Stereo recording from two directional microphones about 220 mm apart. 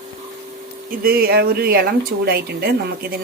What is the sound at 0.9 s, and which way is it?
Speech, 45° right (ahead or behind).